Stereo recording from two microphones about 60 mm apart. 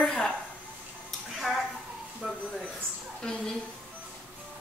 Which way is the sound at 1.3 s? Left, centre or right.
Centre.